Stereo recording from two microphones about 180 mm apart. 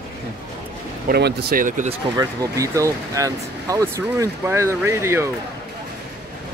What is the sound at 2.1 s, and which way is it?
Speech, 20° right (ahead or behind).